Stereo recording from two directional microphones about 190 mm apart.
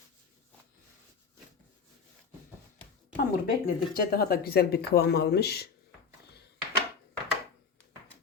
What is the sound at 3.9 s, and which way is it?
Speech, 50° left (ahead or behind).